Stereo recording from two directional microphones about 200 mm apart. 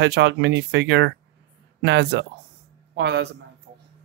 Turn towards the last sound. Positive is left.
turn(degrees=-55)  # may be behind; listen again after turning